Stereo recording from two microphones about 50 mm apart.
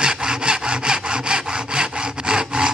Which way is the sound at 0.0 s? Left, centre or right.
Centre.